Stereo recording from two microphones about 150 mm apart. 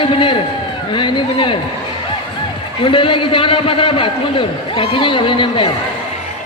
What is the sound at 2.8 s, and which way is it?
A man's voice, 35° left (ahead or behind).